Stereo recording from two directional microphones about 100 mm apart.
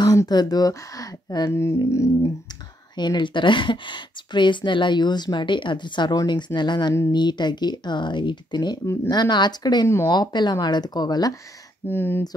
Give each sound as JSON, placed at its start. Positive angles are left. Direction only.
{"t": 0.0, "sound": "speech", "side_deg": 35}
{"t": 1.5, "sound": "speech", "side_deg": 25}
{"t": 1.9, "sound": "a sound", "side_deg": 30}
{"t": 3.0, "sound": "speech", "side_deg": 50}
{"t": 9.8, "sound": "speech", "side_deg": 25}
{"t": 10.1, "sound": "speech", "side_deg": 45}
{"t": 11.9, "sound": "speech", "side_deg": 20}